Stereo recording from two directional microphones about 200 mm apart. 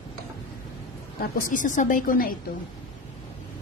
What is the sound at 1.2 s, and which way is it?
A woman's voice, 40° left (ahead or behind).